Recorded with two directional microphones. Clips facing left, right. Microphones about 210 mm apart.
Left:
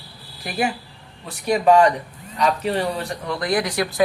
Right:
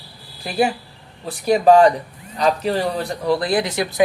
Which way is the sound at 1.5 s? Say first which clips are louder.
Right 3 dB; 35° right (ahead or behind).